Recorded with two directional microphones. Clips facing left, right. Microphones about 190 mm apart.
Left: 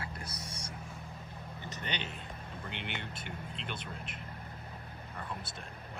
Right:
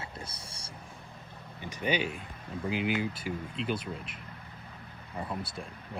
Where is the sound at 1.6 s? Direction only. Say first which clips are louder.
Right 10 dB; 10° right (ahead or behind).